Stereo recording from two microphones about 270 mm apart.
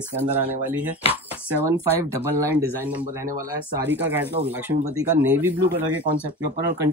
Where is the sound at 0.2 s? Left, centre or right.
Centre.